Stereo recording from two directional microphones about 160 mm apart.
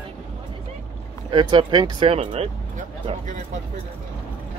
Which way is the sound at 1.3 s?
30° right (ahead or behind).